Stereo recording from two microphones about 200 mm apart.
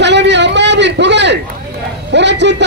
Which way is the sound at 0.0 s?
60° right (ahead or behind).